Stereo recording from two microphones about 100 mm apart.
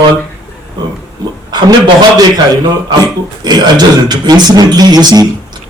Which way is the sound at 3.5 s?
45° right (ahead or behind).